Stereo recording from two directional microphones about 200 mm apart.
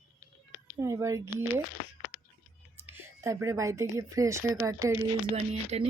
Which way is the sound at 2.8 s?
10° right (ahead or behind).